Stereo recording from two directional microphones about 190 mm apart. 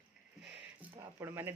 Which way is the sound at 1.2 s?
10° right (ahead or behind).